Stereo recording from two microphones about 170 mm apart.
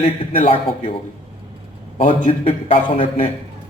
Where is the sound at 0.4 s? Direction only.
35° left (ahead or behind).